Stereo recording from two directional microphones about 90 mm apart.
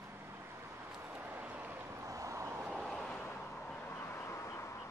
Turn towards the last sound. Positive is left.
turn(degrees=30)  # may be behind; listen again after turning